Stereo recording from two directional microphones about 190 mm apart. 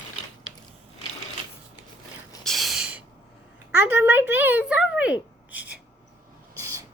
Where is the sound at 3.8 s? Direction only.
10° right (ahead or behind).